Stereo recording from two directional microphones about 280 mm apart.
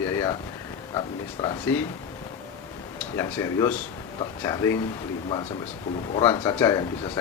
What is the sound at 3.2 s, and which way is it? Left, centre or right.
Speech, centre.